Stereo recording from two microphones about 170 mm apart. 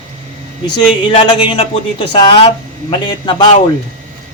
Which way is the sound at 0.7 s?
30° left (ahead or behind).